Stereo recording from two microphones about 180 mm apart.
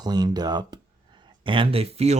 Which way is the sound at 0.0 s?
20° right (ahead or behind).